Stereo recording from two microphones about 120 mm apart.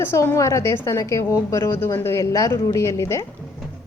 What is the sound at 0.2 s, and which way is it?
A woman's voice, 25° left (ahead or behind).